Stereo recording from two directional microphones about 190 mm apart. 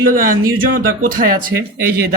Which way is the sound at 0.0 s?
50° right (ahead or behind).